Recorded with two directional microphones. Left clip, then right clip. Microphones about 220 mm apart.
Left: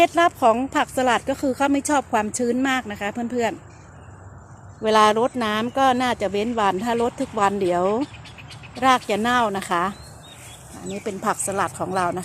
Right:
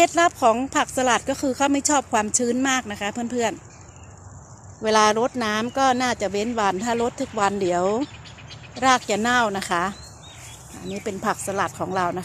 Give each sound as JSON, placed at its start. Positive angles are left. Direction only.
{"t": 0.0, "sound": "speech", "side_deg": 0}
{"t": 4.8, "sound": "speech", "side_deg": 0}
{"t": 8.0, "sound": "a sound", "side_deg": 30}
{"t": 8.8, "sound": "speech", "side_deg": 0}